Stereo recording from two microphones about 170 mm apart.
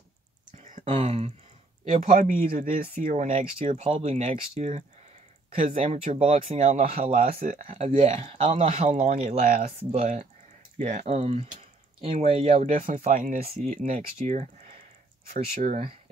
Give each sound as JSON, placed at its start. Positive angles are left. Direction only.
{"t": 0.8, "sound": "speech", "side_deg": -35}
{"t": 1.9, "sound": "speech", "side_deg": -50}
{"t": 8.9, "sound": "speech", "side_deg": -55}
{"t": 12.8, "sound": "speech", "side_deg": -50}
{"t": 13.8, "sound": "speech", "side_deg": -45}